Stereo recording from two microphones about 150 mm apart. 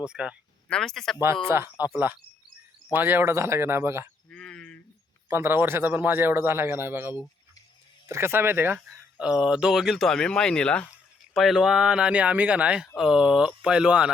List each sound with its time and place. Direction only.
0.0 s speech: 5° right (ahead or behind)
1.5 s speech: 15° right (ahead or behind)
4.3 s a sound: 5° left (ahead or behind)
5.3 s speech: 15° right (ahead or behind)